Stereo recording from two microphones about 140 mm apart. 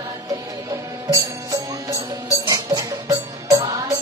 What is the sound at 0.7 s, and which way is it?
Music, 25° right (ahead or behind).